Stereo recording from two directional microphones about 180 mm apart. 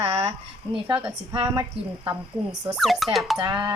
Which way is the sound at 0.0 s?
35° right (ahead or behind).